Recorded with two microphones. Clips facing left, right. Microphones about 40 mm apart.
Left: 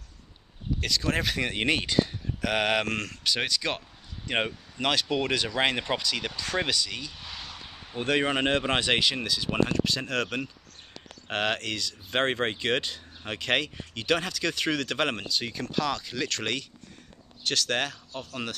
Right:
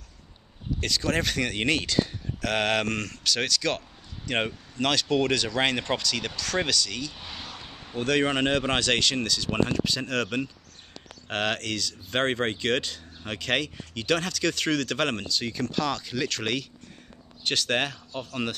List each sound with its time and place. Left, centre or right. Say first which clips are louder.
0.7 s speech: right 1 dB; centre
7.2 s a sound: right 1 dB; centre
8.0 s speech: right 1 dB; centre